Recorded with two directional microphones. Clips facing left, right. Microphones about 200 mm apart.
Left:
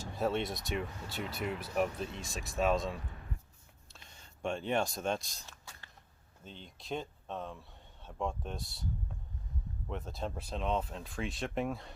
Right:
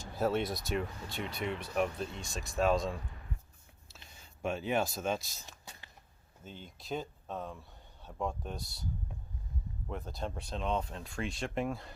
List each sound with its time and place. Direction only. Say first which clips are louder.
0.0 s speech: right 1 dB; centre (ahead or behind)
5.5 s a sound: right 2 dB; 15° right (ahead or behind)
6.4 s speech: right 2 dB; 5° right (ahead or behind)
9.9 s speech: even; centre (ahead or behind)